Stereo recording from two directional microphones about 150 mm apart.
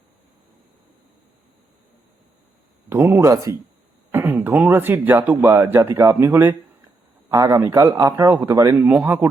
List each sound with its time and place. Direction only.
2.9 s speech: 15° right (ahead or behind)
8.7 s speech: 10° right (ahead or behind)